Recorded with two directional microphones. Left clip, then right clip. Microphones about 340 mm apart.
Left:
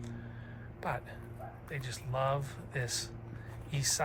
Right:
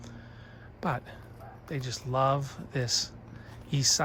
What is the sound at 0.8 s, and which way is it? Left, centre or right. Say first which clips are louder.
Speech: right 5 dB; centre.